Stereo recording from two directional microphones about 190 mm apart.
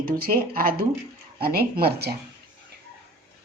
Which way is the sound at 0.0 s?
50° right (ahead or behind).